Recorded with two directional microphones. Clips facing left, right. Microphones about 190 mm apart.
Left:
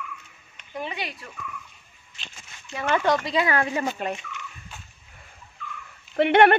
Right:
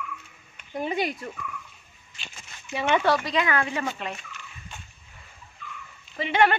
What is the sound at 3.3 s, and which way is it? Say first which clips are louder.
Speech: left 2 dB; 30° left (ahead or behind).